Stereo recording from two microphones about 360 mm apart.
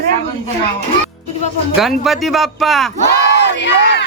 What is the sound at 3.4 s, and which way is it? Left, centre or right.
Crowd, left.